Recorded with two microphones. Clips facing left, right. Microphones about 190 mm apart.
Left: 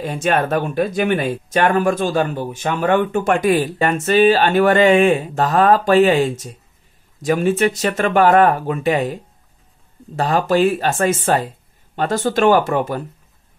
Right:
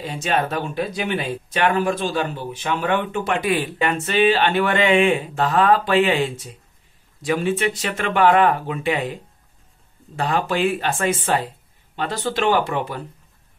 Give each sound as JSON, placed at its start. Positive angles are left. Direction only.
{"t": 0.0, "sound": "speech", "side_deg": 50}